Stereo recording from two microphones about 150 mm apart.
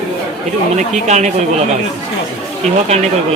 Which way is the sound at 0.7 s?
50° right (ahead or behind).